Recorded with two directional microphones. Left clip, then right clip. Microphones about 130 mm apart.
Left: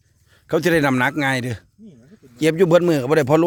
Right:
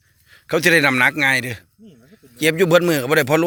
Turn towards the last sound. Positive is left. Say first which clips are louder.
# even
turn(degrees=30)  # may be behind; listen again after turning